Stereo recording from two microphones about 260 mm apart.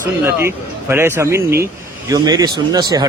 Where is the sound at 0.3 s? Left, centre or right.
Centre.